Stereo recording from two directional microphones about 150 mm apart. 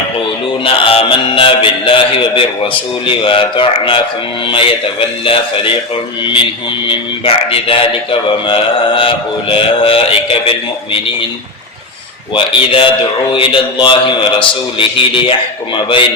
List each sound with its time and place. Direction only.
0.6 s a man's voice: 35° left (ahead or behind)
13.3 s a man's voice: 35° left (ahead or behind)